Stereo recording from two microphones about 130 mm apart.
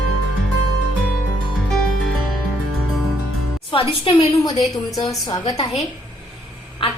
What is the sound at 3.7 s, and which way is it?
Speech, 40° left (ahead or behind).